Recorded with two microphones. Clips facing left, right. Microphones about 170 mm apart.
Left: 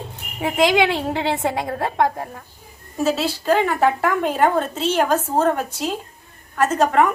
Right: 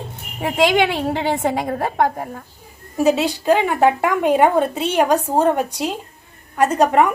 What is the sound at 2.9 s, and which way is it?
A woman's voice, 15° right (ahead or behind).